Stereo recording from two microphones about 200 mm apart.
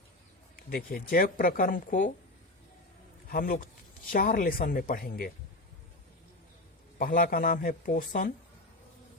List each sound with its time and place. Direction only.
0.5 s speech: 45° left (ahead or behind)
3.2 s a man's voice: 45° left (ahead or behind)
7.0 s speech: 45° left (ahead or behind)